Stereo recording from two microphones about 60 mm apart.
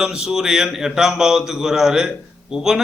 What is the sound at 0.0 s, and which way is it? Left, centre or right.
A man's voice, centre.